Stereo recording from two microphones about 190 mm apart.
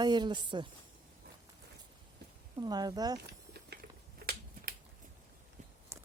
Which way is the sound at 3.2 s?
60° right (ahead or behind).